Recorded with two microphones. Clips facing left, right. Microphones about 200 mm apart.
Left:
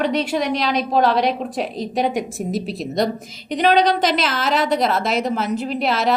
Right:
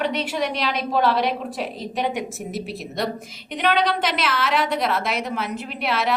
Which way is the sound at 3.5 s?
35° left (ahead or behind).